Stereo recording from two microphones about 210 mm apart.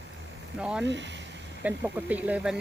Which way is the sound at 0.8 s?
55° right (ahead or behind).